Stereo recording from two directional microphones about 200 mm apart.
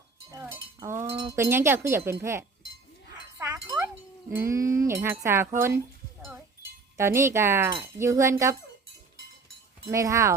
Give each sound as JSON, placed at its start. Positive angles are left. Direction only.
{"t": 0.3, "sound": "cowbell", "side_deg": -15}
{"t": 1.4, "sound": "speech", "side_deg": -10}
{"t": 3.3, "sound": "wind chime", "side_deg": -15}
{"t": 4.3, "sound": "speech", "side_deg": -15}
{"t": 6.9, "sound": "speech", "side_deg": -15}
{"t": 9.9, "sound": "speech", "side_deg": -15}